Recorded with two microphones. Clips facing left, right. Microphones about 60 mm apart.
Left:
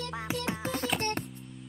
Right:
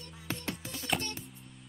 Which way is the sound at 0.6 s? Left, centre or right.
Left.